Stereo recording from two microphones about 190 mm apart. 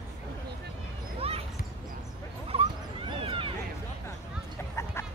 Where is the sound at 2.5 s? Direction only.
30° right (ahead or behind).